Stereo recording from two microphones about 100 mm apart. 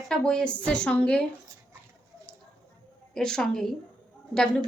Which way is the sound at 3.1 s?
5° left (ahead or behind).